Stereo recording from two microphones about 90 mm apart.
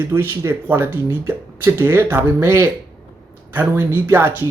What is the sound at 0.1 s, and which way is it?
Speech, 25° right (ahead or behind).